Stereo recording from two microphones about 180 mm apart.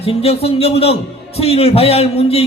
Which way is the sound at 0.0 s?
35° left (ahead or behind).